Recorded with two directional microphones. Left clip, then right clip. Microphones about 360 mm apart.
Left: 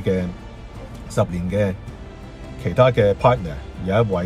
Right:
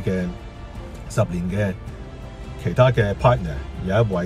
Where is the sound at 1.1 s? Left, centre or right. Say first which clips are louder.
Left 2 dB; centre.